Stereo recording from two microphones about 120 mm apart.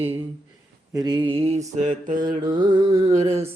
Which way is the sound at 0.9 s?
40° right (ahead or behind).